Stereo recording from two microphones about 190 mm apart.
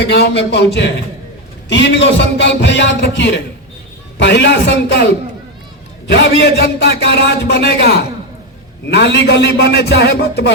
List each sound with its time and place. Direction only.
0.0 s a man's voice: 65° left (ahead or behind)